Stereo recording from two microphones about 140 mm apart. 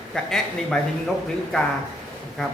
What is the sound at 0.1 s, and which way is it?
Speech, 5° left (ahead or behind).